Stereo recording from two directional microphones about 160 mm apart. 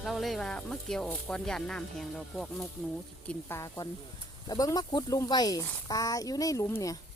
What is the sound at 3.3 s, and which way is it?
Speech, 15° left (ahead or behind).